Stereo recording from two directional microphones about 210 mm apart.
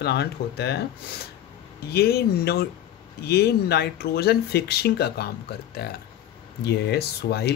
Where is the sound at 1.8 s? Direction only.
50° left (ahead or behind).